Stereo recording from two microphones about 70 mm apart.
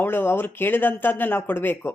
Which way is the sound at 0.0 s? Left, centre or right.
Left.